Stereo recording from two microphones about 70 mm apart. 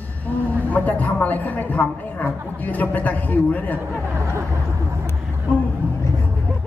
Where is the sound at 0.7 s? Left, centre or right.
Left.